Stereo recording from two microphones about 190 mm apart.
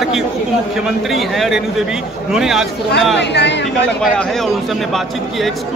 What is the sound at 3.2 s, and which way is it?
Speech, 65° left (ahead or behind).